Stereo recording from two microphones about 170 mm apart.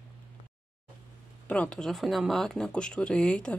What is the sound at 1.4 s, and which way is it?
Speech, 10° left (ahead or behind).